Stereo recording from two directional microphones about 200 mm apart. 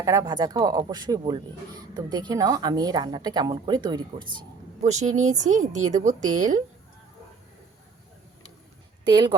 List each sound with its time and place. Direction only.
0.0 s speech: 15° right (ahead or behind)
4.8 s speech: 35° right (ahead or behind)
9.0 s speech: 25° right (ahead or behind)